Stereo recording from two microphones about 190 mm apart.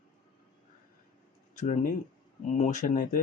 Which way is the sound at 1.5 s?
40° left (ahead or behind).